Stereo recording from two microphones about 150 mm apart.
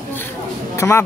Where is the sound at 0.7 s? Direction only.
15° left (ahead or behind).